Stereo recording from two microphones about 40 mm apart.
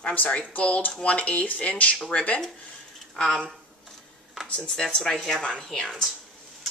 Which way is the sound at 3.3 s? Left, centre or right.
Centre.